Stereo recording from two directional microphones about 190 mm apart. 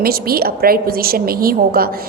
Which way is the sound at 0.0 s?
55° right (ahead or behind).